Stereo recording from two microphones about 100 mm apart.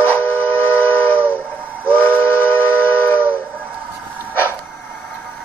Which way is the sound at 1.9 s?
15° left (ahead or behind).